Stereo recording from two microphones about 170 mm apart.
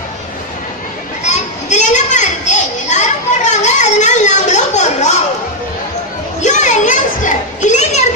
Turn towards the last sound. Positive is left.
turn(degrees=45)  # may be behind; listen again after turning